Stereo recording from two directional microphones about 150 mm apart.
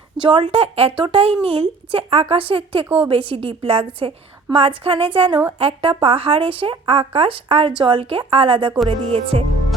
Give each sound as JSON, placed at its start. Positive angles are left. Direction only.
{"t": 0.2, "sound": "a woman's voice", "side_deg": -35}